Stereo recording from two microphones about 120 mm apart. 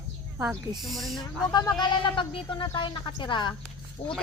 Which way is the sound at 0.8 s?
Centre (ahead or behind).